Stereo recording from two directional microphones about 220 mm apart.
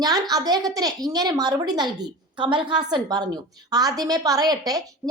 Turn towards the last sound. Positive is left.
turn(degrees=-15)  # may be behind; listen again after turning